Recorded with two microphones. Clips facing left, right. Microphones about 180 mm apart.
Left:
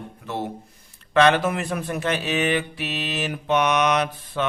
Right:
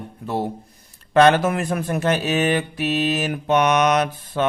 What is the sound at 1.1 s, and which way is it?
Speech, 45° right (ahead or behind).